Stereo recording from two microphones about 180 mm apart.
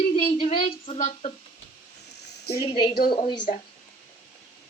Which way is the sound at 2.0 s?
70° left (ahead or behind).